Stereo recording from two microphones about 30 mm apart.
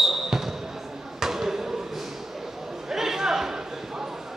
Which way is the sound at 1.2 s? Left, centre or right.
Centre.